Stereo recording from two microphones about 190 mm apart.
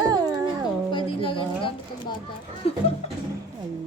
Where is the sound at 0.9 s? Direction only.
25° left (ahead or behind).